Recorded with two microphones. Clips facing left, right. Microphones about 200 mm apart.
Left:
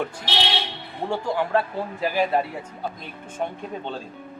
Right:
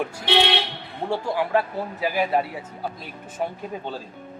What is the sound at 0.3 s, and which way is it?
Speech, 60° right (ahead or behind).